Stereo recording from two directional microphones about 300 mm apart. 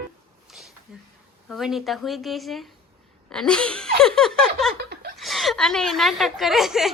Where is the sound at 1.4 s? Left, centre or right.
Centre.